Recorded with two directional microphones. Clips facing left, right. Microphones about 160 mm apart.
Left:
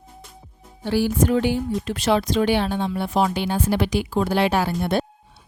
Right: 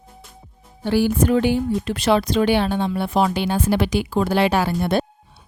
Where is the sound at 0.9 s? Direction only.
60° right (ahead or behind); by 5.0 s 90° right.